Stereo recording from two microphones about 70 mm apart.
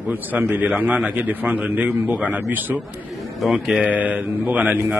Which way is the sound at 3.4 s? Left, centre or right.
Centre.